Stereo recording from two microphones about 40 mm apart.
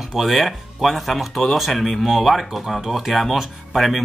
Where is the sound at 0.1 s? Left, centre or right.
Centre.